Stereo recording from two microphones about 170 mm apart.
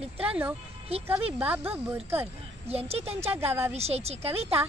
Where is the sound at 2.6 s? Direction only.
35° right (ahead or behind).